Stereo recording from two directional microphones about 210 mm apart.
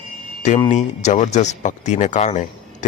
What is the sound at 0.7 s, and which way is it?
Speech, 35° left (ahead or behind).